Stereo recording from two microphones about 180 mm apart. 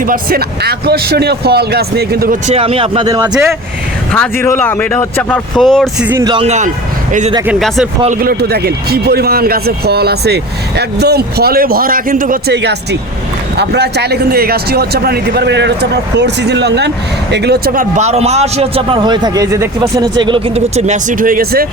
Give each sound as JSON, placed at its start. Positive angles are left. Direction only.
{"t": 0.0, "sound": "a man's voice", "side_deg": -55}
{"t": 2.5, "sound": "a man's voice", "side_deg": -30}
{"t": 3.1, "sound": "speech", "side_deg": -20}
{"t": 4.1, "sound": "speech", "side_deg": 5}
{"t": 6.1, "sound": "speech", "side_deg": -15}
{"t": 6.3, "sound": "a man's voice", "side_deg": -35}
{"t": 8.2, "sound": "a man's voice", "side_deg": -60}
{"t": 12.5, "sound": "a man's voice", "side_deg": -70}
{"t": 17.9, "sound": "a man's voice", "side_deg": -40}